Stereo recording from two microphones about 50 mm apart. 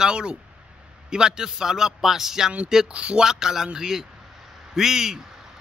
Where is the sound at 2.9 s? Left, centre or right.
Right.